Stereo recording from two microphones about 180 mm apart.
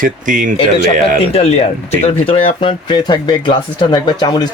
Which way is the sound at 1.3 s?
35° left (ahead or behind).